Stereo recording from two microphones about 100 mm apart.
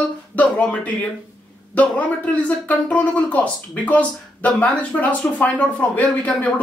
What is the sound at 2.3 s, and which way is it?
Speech, 15° left (ahead or behind).